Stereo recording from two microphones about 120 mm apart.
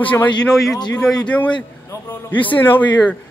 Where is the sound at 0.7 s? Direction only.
35° left (ahead or behind).